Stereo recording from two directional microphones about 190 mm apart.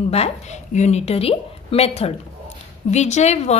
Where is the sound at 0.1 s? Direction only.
35° left (ahead or behind).